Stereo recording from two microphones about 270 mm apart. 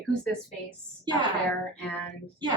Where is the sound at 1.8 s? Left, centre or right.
Centre.